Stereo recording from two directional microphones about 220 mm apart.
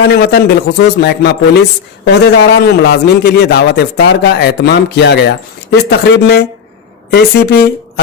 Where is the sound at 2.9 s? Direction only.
50° left (ahead or behind).